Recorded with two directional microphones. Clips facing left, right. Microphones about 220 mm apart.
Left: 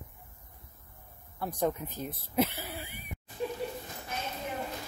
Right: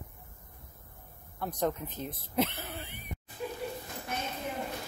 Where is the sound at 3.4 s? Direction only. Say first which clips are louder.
Left 3 dB; 30° left (ahead or behind).